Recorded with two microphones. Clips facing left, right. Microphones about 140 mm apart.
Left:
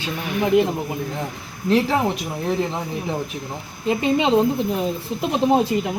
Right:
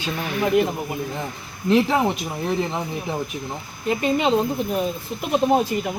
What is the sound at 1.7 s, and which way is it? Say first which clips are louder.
Speech: even; centre (ahead or behind).